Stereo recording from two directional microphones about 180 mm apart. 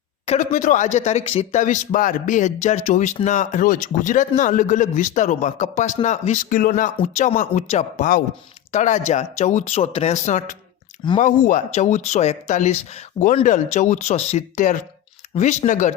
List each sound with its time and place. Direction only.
0.3 s speech: 45° left (ahead or behind)